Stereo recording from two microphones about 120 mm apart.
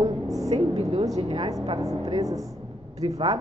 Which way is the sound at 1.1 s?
50° right (ahead or behind).